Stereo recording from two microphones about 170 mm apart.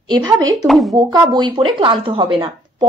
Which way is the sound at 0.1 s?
20° right (ahead or behind).